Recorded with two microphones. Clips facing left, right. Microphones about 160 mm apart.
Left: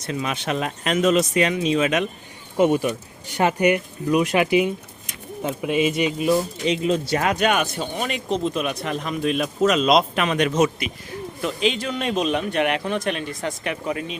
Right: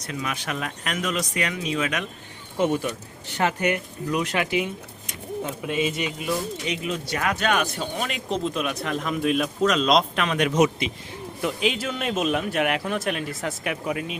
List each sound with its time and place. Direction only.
0.0 s speech: 25° left (ahead or behind)
2.6 s speech: 10° left (ahead or behind)
7.6 s speech: centre (ahead or behind)
10.4 s speech: 15° right (ahead or behind)